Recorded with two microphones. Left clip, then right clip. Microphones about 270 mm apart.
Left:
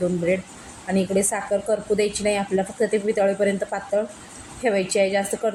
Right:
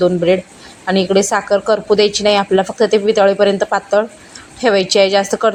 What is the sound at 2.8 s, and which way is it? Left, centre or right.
Speech, right.